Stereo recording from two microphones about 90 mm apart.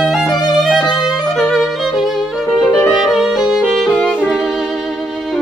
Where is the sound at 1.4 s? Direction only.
5° left (ahead or behind).